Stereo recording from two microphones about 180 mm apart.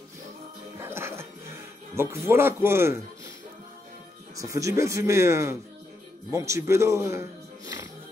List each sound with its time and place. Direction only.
0.7 s music: 15° right (ahead or behind)
2.0 s speech: 15° right (ahead or behind)
4.4 s speech: 20° right (ahead or behind)